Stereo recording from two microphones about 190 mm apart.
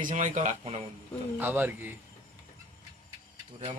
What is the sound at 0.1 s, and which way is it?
Speech, 40° right (ahead or behind).